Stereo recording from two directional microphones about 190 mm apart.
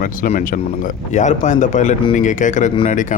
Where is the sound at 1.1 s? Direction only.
40° left (ahead or behind).